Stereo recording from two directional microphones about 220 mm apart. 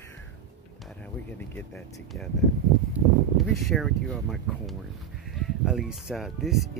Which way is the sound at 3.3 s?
Centre (ahead or behind).